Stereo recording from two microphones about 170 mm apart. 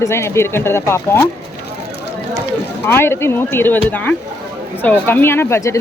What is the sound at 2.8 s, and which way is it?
Speech, 15° left (ahead or behind).